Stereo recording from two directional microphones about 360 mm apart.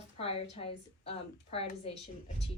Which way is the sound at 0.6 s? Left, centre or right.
Centre.